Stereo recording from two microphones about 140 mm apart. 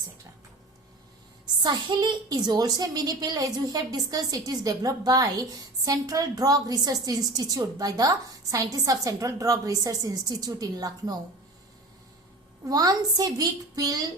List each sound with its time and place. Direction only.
1.6 s a woman's voice: 30° right (ahead or behind)
12.6 s a woman's voice: 25° right (ahead or behind)